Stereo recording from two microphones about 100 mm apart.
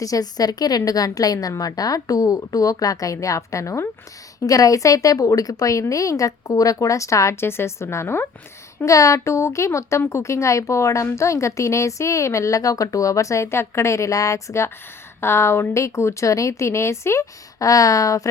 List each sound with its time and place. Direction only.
0.0 s a woman's voice: 40° left (ahead or behind); by 8.3 s 20° left (ahead or behind)
8.8 s a woman's voice: 35° left (ahead or behind)